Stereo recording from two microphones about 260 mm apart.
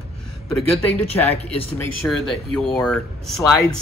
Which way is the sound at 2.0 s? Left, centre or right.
Centre.